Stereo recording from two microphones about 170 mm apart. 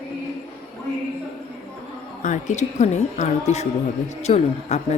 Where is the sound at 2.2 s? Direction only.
45° left (ahead or behind).